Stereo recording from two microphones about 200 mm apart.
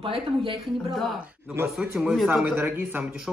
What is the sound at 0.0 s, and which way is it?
Speech, 25° right (ahead or behind).